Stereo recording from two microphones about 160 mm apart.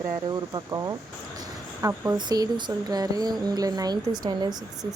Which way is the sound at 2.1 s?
25° right (ahead or behind).